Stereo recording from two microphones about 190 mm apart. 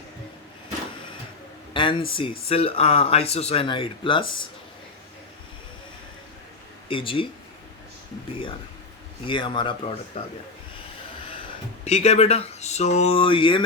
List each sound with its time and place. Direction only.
1.7 s a sound: 25° left (ahead or behind)
2.5 s speech: 30° left (ahead or behind)
6.8 s speech: 30° left (ahead or behind)
9.2 s speech: 25° left (ahead or behind)
11.9 s speech: 35° left (ahead or behind)